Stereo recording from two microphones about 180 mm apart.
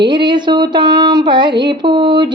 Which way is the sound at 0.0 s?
25° right (ahead or behind).